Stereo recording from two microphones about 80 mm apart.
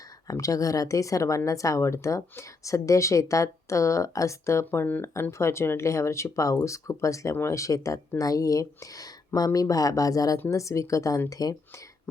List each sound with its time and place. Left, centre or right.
0.3 s speech: left